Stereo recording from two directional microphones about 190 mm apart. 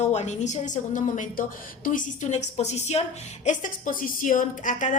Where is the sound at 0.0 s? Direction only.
35° left (ahead or behind).